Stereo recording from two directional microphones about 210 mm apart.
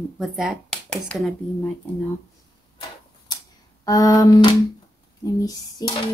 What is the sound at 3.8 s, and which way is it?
Cutlery, 15° left (ahead or behind).